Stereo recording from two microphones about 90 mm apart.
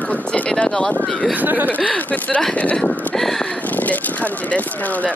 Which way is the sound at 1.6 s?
15° left (ahead or behind).